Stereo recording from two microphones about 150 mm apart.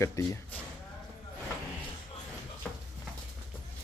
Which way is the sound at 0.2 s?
20° left (ahead or behind).